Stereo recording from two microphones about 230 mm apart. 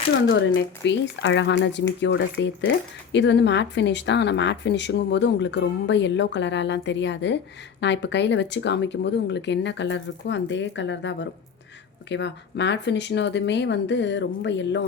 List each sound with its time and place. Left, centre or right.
0.3 s speech: left